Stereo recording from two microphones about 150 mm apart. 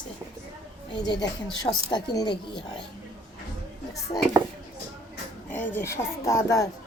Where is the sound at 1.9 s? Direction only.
30° left (ahead or behind).